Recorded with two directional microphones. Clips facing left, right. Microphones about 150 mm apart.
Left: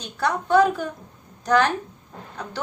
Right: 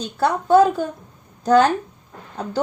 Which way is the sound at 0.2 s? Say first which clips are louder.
Right 4 dB; 30° right (ahead or behind).